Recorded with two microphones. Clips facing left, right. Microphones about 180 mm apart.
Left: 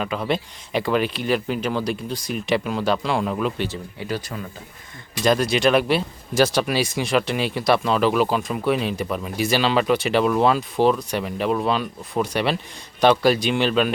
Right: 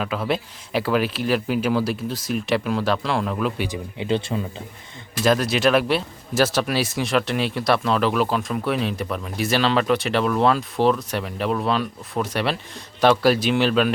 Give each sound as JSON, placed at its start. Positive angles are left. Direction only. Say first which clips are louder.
{"t": 0.0, "sound": "speech", "louder": "even", "side_deg": 0}
{"t": 3.6, "sound": "speech", "louder": "right 1 dB", "side_deg": -15}
{"t": 5.2, "sound": "speech", "louder": "even", "side_deg": 0}